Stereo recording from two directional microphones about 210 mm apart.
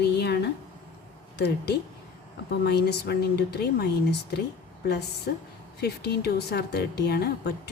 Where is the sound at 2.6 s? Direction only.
50° left (ahead or behind).